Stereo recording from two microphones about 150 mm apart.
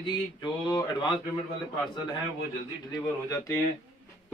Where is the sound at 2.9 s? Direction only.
20° left (ahead or behind).